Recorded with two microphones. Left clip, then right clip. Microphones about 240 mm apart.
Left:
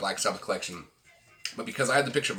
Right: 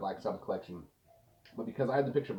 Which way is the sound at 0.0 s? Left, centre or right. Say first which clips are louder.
Left 7 dB; centre.